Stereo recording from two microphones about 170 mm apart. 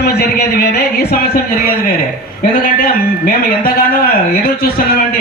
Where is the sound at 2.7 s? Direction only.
60° left (ahead or behind).